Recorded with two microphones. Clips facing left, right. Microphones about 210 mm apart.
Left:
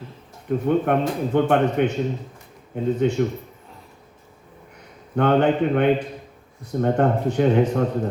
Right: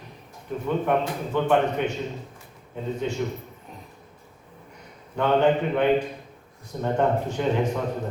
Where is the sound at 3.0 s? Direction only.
60° left (ahead or behind).